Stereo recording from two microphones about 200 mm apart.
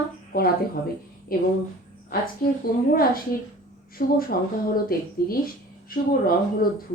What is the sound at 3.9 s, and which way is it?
A woman's voice, 45° left (ahead or behind).